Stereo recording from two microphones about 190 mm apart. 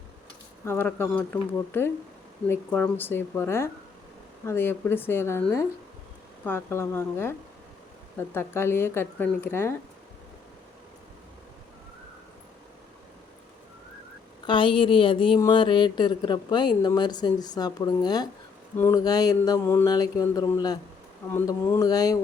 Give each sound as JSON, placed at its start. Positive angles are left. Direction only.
{"t": 0.6, "sound": "speech", "side_deg": 10}
{"t": 14.4, "sound": "a woman's voice", "side_deg": 25}